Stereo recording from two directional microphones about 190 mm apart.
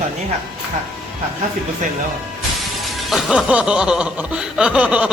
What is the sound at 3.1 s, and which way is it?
Chuckle, centre (ahead or behind).